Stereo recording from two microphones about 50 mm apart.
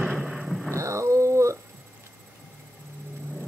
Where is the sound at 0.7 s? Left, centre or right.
Right.